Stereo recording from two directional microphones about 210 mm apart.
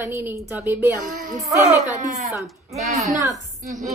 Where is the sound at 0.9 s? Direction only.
40° right (ahead or behind).